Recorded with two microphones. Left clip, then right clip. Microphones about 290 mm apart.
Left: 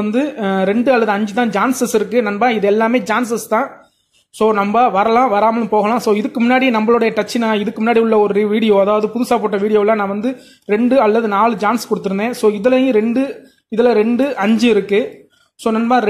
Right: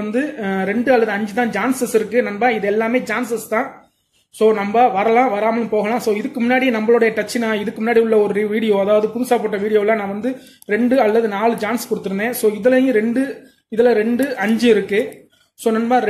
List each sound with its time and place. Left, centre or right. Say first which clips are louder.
0.1 s a man's voice: left 2 dB; left